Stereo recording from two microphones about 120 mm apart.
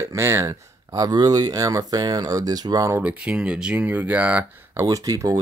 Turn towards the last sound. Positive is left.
turn(degrees=-30)  # may be behind; listen again after turning